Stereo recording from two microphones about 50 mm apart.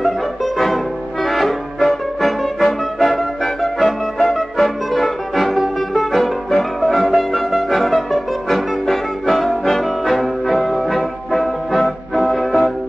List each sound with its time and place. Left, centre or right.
0.0 s music: centre
1.2 s brass instrument: centre